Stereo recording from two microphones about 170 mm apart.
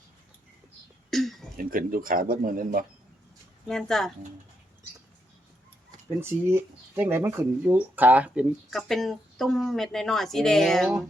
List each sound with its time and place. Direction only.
1.1 s a sound: centre (ahead or behind)
1.5 s speech: 55° right (ahead or behind)
3.7 s speech: centre (ahead or behind)
6.1 s speech: 15° right (ahead or behind); by 10.9 s centre (ahead or behind)